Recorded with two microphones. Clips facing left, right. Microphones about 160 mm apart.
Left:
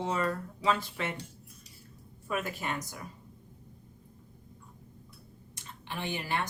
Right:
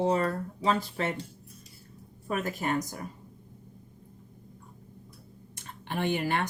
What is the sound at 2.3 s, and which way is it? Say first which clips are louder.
Speech: right 4 dB; 40° right (ahead or behind).